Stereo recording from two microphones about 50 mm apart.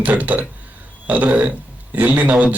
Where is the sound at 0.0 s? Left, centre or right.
Right.